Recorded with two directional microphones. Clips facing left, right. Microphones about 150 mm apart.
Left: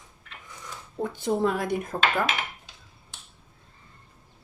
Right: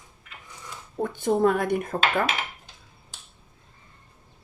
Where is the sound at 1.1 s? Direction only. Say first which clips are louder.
Right 4 dB; 50° right (ahead or behind).